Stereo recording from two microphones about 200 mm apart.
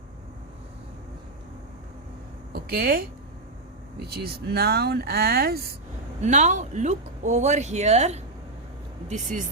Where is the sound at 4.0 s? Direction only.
55° right (ahead or behind).